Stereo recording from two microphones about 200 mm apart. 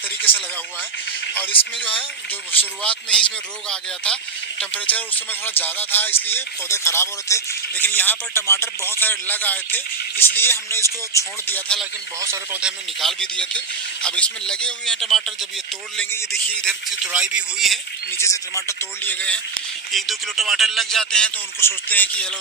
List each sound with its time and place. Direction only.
0.3 s speech: 25° left (ahead or behind)
1.4 s speech: 10° left (ahead or behind)
12.2 s speech: 10° right (ahead or behind)
16.0 s speech: 10° left (ahead or behind)
17.1 s speech: 5° right (ahead or behind)
18.2 s speech: 15° left (ahead or behind)